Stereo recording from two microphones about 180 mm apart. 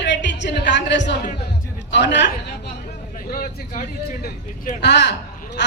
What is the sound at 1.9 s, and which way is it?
Speech, 75° left (ahead or behind).